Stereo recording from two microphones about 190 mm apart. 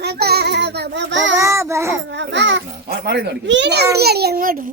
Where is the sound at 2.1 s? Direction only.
70° right (ahead or behind).